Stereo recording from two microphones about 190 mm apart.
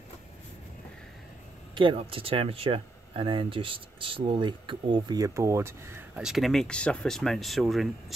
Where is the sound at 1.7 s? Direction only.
25° right (ahead or behind).